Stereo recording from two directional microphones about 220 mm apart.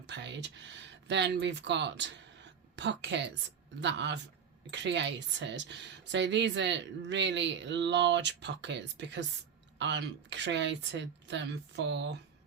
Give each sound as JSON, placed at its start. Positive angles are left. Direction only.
{"t": 0.1, "sound": "speech", "side_deg": -55}